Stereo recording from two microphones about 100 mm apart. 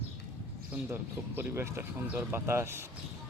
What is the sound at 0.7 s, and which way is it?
Speech, 20° right (ahead or behind).